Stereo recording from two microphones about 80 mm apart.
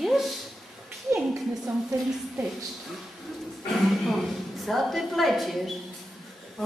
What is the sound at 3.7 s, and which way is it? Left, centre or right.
A woman's voice, centre.